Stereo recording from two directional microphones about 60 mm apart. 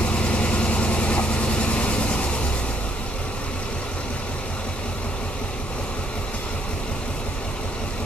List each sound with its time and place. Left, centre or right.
0.1 s vehicle: centre